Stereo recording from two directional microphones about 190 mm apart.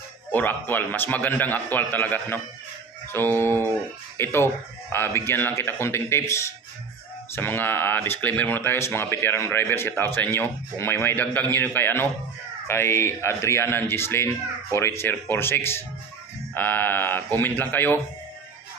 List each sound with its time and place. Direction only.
0.3 s speech: 10° left (ahead or behind)